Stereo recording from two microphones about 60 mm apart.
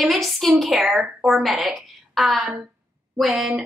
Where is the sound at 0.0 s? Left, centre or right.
Centre.